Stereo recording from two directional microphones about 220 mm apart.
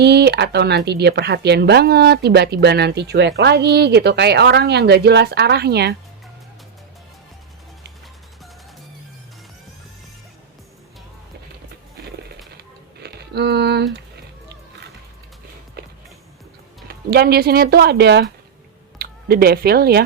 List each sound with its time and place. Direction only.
0.0 s speech: 50° right (ahead or behind)
12.5 s a sound: 45° right (ahead or behind)
15.8 s music: 45° right (ahead or behind)
16.9 s speech: 45° right (ahead or behind)